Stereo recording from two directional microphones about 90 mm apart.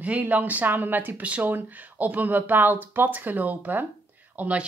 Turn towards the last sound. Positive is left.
turn(degrees=-15)  # may be behind; listen again after turning